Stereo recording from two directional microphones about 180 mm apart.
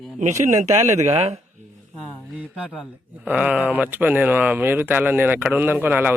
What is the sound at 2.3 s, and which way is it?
Speech, 5° right (ahead or behind).